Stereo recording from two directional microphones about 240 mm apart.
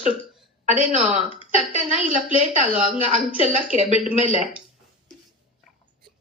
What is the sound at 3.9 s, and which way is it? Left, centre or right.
Speech, left.